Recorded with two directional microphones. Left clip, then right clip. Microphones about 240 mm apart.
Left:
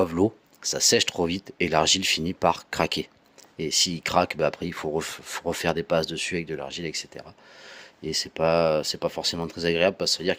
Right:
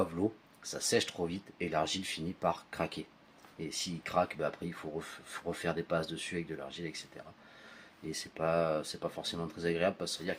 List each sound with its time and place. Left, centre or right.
0.0 s rub: left
8.1 s rub: left